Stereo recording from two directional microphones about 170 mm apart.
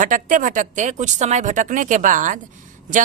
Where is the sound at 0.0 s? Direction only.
50° right (ahead or behind).